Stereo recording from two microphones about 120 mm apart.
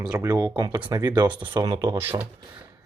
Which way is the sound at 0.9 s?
30° right (ahead or behind).